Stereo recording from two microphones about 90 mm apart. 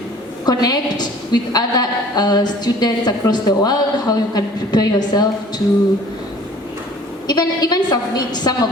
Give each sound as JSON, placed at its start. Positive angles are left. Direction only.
{"t": 0.4, "sound": "a woman's voice", "side_deg": 50}
{"t": 7.3, "sound": "a woman's voice", "side_deg": 50}